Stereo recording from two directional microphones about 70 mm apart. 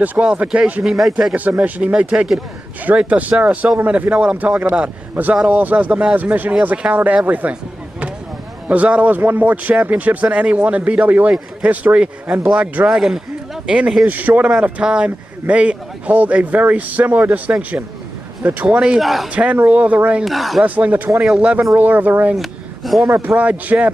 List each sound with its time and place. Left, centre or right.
0.0 s speech: right
0.8 s speech: centre
1.3 s speech: right
8.6 s speech: centre
18.8 s speech: centre
19.2 s speech: centre
20.2 s speech: centre
20.6 s speech: right
22.3 s speech: centre
23.0 s speech: right
23.3 s speech: right